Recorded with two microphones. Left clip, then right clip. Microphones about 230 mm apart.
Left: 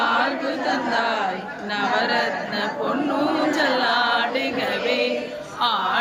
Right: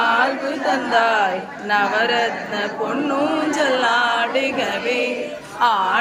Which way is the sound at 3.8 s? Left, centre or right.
Centre.